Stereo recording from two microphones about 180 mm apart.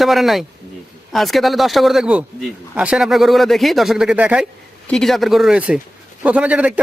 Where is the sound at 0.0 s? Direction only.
Centre (ahead or behind).